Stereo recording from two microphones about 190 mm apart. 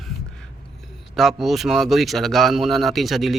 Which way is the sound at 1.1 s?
Centre (ahead or behind).